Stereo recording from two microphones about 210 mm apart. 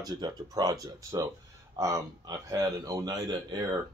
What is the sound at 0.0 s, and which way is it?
Speech, 20° right (ahead or behind).